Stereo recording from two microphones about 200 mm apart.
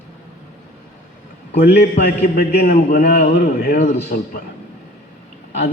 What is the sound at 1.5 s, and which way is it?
Speech, 55° left (ahead or behind).